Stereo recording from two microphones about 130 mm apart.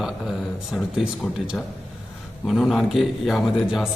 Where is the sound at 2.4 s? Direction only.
Centre (ahead or behind).